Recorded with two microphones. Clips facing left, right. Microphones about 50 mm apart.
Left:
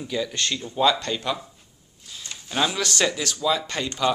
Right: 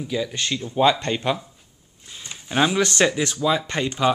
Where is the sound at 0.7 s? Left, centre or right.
Right.